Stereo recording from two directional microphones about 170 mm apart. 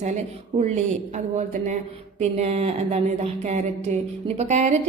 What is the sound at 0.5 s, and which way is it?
A woman's voice, 40° right (ahead or behind).